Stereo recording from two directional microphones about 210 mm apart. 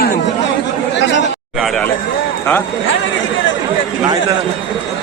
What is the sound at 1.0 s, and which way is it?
Speech, 55° left (ahead or behind).